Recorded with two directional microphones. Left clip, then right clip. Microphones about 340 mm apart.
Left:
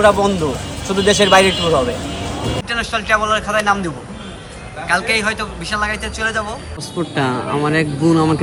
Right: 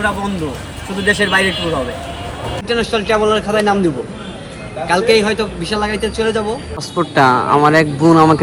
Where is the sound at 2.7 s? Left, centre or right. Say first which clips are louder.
Right 2 dB; centre.